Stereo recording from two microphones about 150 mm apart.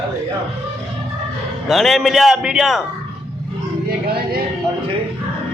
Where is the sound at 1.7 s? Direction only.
Centre (ahead or behind).